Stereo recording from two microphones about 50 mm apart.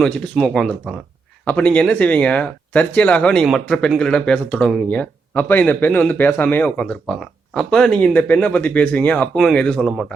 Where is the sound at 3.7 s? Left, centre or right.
Centre.